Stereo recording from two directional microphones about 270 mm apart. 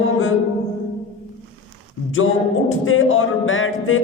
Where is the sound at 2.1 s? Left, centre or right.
Left.